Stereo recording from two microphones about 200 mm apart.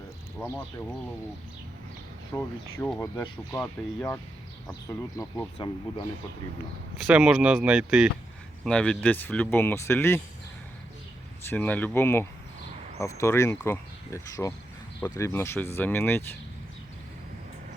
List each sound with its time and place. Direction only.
0.3 s speech: 10° left (ahead or behind)
2.3 s speech: 10° left (ahead or behind)
7.0 s speech: 5° right (ahead or behind); by 10.2 s 10° left (ahead or behind)
11.4 s speech: 10° left (ahead or behind)